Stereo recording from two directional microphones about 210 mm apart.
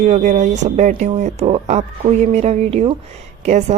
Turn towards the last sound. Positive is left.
turn(degrees=-35)  # may be behind; listen again after turning